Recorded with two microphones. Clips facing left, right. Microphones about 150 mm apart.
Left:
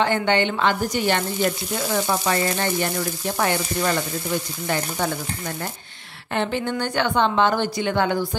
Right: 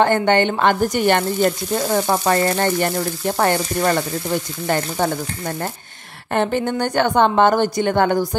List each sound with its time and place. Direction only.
0.0 s speech: 50° right (ahead or behind)
6.3 s speech: 50° right (ahead or behind)